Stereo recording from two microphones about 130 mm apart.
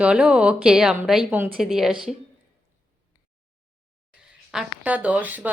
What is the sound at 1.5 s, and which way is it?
Speech, centre (ahead or behind).